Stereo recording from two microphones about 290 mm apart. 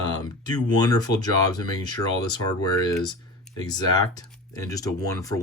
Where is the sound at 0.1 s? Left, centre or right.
Centre.